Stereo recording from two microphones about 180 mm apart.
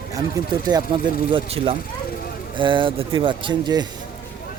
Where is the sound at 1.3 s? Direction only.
30° right (ahead or behind).